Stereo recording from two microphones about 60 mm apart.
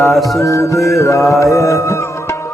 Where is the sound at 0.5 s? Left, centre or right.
Left.